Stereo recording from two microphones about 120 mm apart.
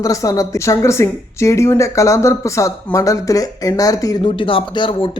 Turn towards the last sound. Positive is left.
turn(degrees=45)  # may be behind; listen again after turning